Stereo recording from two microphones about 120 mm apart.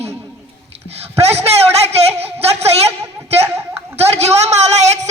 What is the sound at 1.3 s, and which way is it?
A man's voice, 60° right (ahead or behind).